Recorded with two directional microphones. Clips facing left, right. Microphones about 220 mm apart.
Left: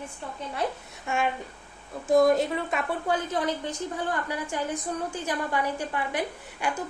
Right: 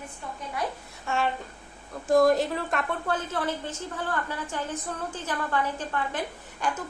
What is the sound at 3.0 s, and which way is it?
A woman's voice, 15° left (ahead or behind).